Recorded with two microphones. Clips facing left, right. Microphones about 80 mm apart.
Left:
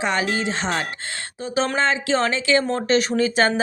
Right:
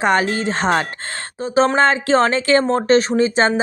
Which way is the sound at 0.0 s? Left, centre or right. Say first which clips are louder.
Right 5 dB; right.